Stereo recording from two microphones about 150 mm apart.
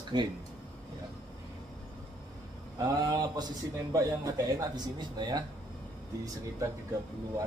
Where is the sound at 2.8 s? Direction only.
25° right (ahead or behind).